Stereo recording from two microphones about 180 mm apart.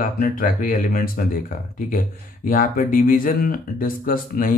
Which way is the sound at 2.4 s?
50° left (ahead or behind).